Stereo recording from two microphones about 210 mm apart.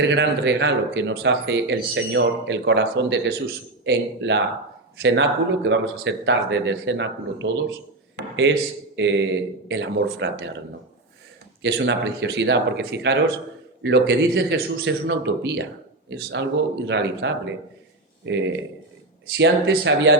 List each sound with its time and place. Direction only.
0.0 s speech: 55° right (ahead or behind)
11.6 s speech: 55° right (ahead or behind)